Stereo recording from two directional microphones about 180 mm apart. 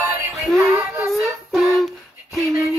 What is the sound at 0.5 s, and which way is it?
Female singing, 15° right (ahead or behind).